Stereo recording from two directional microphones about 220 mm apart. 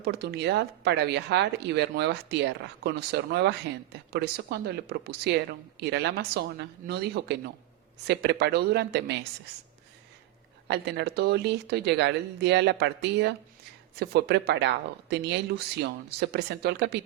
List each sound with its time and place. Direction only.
0.0 s speech: 50° right (ahead or behind)
10.7 s speech: 50° right (ahead or behind)